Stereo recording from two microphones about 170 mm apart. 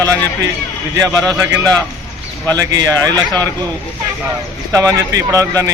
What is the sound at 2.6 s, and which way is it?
Speech, 20° right (ahead or behind).